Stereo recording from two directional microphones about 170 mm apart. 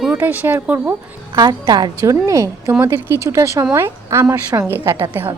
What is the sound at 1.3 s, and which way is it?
A woman's voice, 25° right (ahead or behind).